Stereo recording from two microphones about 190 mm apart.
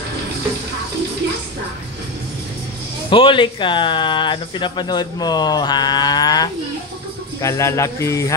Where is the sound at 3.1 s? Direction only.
25° left (ahead or behind).